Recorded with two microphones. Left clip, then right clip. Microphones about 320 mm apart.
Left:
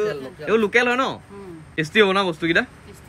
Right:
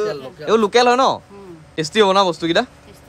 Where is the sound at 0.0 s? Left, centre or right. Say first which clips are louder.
Right 2 dB; right.